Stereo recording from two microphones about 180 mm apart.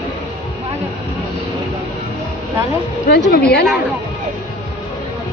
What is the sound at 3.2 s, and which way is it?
Speech, 60° left (ahead or behind).